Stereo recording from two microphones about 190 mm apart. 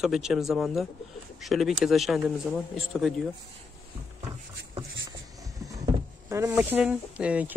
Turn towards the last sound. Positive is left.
turn(degrees=-5)  # may be behind; listen again after turning